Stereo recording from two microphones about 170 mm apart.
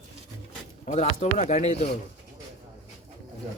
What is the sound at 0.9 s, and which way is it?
Speech, 40° left (ahead or behind).